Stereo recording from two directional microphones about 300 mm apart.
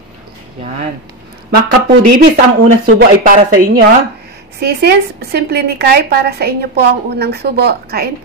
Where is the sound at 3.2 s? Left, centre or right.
Right.